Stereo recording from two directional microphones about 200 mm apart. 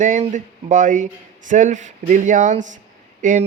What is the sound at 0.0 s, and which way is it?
Speech, 40° right (ahead or behind).